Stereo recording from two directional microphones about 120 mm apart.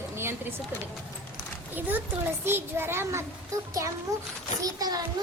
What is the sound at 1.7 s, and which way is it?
A woman's voice, 15° right (ahead or behind).